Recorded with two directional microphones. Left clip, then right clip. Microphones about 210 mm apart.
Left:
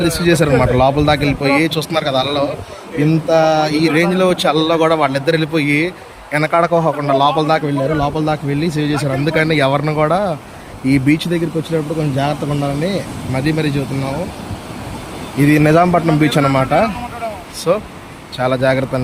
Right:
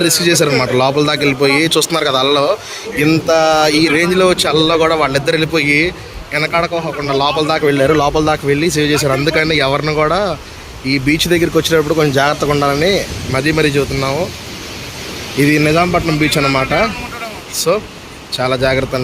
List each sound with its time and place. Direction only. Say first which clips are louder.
0.0 s speech: right 2 dB; 10° left (ahead or behind)
15.4 s speech: even; 10° left (ahead or behind)